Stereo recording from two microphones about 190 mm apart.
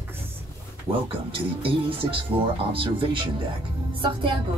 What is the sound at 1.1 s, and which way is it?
A woman's voice, 30° right (ahead or behind).